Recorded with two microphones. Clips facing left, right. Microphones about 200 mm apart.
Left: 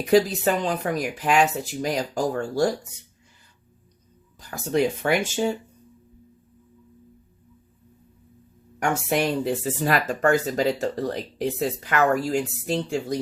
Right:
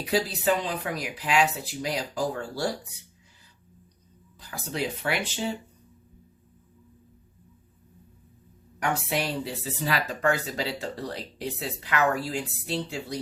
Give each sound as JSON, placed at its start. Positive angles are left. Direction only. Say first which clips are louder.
{"t": 0.0, "sound": "speech", "louder": "left 7 dB", "side_deg": 45}
{"t": 4.4, "sound": "speech", "louder": "left 9 dB", "side_deg": 45}
{"t": 8.8, "sound": "speech", "louder": "left 5 dB", "side_deg": 45}